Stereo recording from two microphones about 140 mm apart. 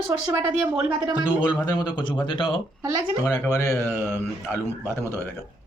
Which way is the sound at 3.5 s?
20° left (ahead or behind).